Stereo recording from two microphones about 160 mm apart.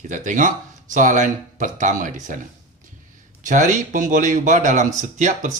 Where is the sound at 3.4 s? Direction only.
50° right (ahead or behind).